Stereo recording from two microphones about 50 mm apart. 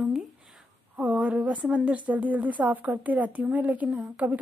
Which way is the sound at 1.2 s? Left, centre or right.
Right.